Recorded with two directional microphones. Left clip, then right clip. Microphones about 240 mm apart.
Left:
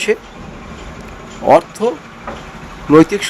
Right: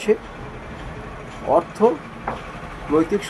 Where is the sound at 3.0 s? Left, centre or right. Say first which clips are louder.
Left 4 dB; left.